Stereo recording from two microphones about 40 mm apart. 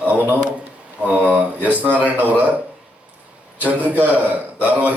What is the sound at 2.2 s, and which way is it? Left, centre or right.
Speech, right.